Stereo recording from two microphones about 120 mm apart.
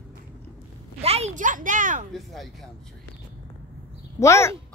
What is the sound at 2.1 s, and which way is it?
Speech, centre (ahead or behind).